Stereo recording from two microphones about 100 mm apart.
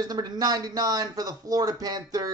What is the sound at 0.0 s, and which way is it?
Speech, 40° right (ahead or behind).